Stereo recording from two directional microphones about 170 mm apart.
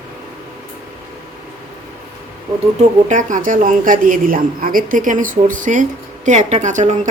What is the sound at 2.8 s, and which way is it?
Speech, 45° right (ahead or behind).